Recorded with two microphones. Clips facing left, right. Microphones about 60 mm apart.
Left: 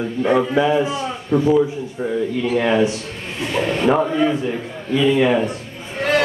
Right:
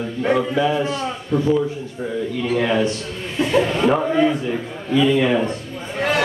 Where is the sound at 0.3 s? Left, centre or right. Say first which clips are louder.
Left 2 dB; centre.